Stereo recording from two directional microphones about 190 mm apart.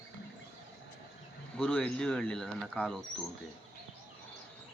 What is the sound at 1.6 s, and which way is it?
Speech, 5° left (ahead or behind).